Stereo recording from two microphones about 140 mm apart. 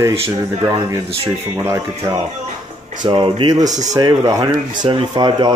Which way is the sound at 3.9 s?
30° right (ahead or behind).